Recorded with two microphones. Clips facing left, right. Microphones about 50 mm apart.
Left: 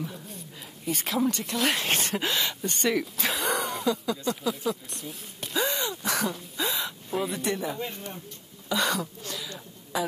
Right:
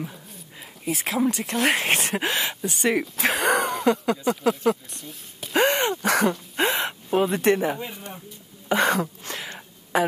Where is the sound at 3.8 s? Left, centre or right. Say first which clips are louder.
Right 6 dB; right.